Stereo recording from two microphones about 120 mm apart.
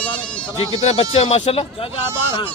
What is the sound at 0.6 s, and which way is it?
A man's voice, 55° left (ahead or behind).